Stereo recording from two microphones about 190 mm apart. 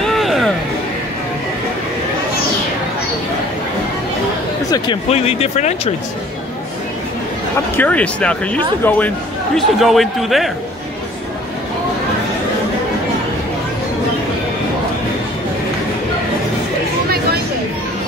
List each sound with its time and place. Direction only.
0.0 s music: centre (ahead or behind)
4.6 s a sound: 20° left (ahead or behind)
5.1 s speech: 30° left (ahead or behind)
7.7 s speech: 10° left (ahead or behind)